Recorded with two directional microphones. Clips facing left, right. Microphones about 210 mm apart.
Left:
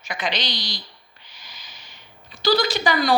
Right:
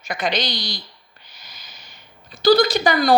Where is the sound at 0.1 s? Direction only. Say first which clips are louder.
Right 4 dB; 45° right (ahead or behind).